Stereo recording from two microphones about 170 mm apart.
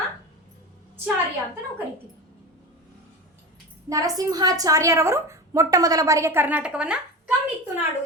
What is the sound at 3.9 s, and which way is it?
A woman's voice, 20° right (ahead or behind).